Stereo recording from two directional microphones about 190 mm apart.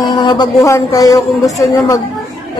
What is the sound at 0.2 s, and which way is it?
A woman's voice, 20° left (ahead or behind).